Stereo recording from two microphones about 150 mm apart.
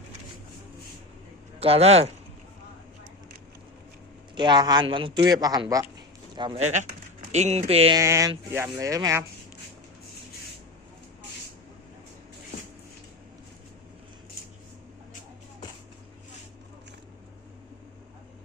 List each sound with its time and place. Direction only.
1.5 s speech: 40° right (ahead or behind)
4.4 s speech: 30° right (ahead or behind)
7.3 s speech: 45° right (ahead or behind)
7.9 s speech: 20° right (ahead or behind)